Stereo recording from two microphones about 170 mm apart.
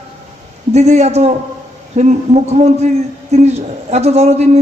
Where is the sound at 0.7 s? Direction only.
40° right (ahead or behind).